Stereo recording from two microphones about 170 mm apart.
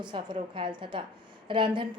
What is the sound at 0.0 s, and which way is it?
A woman's voice, 25° right (ahead or behind).